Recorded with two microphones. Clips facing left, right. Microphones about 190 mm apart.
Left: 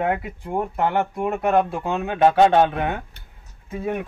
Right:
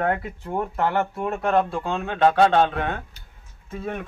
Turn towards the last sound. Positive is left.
turn(degrees=10)  # may be behind; listen again after turning